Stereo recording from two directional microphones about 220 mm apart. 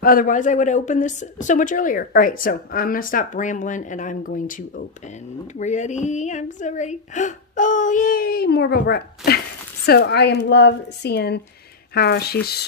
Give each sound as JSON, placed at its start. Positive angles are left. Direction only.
{"t": 0.0, "sound": "a woman's voice", "side_deg": 40}